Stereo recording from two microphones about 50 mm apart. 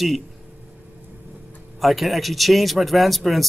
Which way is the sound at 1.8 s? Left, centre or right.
Centre.